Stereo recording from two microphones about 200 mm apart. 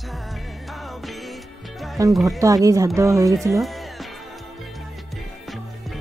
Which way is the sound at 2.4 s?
15° right (ahead or behind).